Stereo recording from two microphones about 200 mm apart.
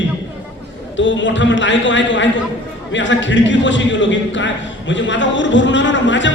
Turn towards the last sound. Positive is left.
turn(degrees=65)  # may be behind; listen again after turning